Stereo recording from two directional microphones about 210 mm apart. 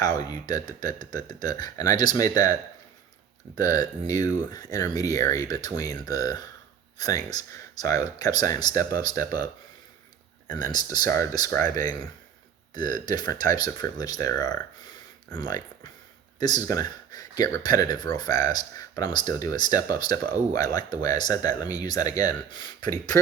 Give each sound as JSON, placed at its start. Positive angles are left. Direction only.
{"t": 0.0, "sound": "speech", "side_deg": 15}
{"t": 10.9, "sound": "speech", "side_deg": 15}